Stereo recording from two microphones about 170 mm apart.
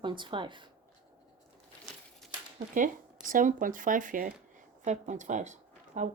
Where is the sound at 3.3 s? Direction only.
50° right (ahead or behind).